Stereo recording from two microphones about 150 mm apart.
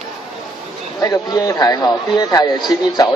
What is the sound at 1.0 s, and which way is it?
Speech, 25° left (ahead or behind).